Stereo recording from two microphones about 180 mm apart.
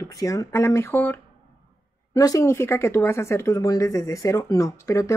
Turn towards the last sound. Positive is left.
turn(degrees=15)  # may be behind; listen again after turning